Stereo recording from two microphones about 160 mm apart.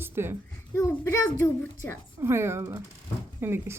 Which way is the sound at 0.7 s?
20° left (ahead or behind).